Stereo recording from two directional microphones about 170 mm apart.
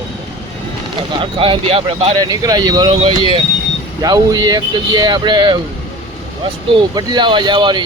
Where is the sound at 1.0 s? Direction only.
30° right (ahead or behind).